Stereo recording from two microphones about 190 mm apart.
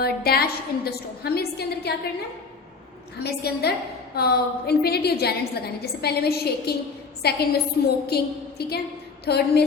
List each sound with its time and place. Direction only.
0.0 s a woman's voice: 55° left (ahead or behind)
3.2 s a woman's voice: 60° left (ahead or behind)